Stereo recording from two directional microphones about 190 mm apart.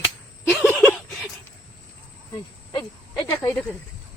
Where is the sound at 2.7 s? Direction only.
20° left (ahead or behind).